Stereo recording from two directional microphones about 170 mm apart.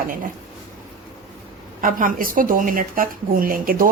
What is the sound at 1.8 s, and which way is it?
A woman's voice, 50° right (ahead or behind).